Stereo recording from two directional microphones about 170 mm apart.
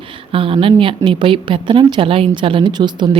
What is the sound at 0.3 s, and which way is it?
A woman's voice, 30° right (ahead or behind).